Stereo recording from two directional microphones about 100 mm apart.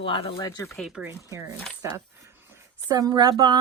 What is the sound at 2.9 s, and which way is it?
Speech, 40° right (ahead or behind).